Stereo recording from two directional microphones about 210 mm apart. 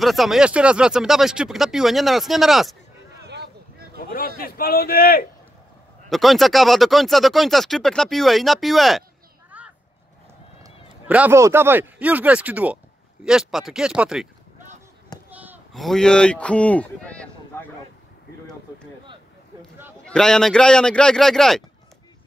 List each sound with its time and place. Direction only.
0.0 s speech: centre (ahead or behind)
4.4 s a man's voice: 45° left (ahead or behind)
6.0 s speech: centre (ahead or behind)
9.5 s vehicle: 5° right (ahead or behind)
10.6 s speech: 10° right (ahead or behind)
20.1 s speech: 5° left (ahead or behind)